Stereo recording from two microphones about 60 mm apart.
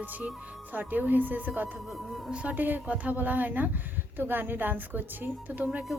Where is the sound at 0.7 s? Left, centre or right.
Right.